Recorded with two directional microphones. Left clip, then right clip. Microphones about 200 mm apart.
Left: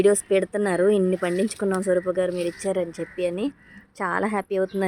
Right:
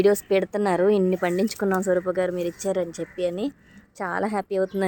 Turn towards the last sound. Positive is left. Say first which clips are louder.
# even
turn(degrees=5)  # may be behind; listen again after turning